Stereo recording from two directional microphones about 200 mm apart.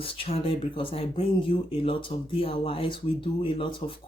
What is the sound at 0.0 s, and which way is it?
Speech, 30° left (ahead or behind).